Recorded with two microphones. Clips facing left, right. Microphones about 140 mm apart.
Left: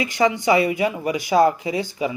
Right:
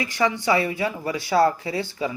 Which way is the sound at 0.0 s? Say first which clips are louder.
Left 4 dB; 20° left (ahead or behind).